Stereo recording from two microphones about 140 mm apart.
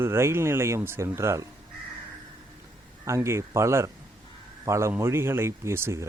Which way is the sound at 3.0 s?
20° right (ahead or behind).